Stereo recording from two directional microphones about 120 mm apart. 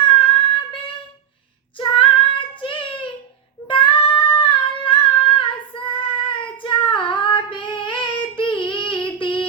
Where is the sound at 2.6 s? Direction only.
45° left (ahead or behind).